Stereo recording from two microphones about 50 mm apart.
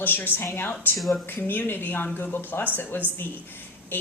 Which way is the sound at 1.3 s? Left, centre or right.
Left.